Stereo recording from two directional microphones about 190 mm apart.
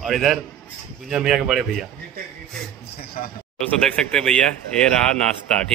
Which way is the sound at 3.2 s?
45° left (ahead or behind).